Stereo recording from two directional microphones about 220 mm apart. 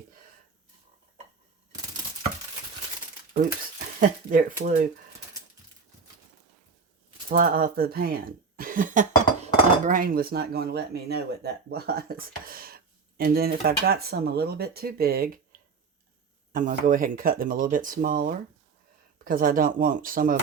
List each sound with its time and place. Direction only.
4.0 s speech: 40° right (ahead or behind)
7.3 s speech: 40° right (ahead or behind)
16.5 s speech: 35° right (ahead or behind)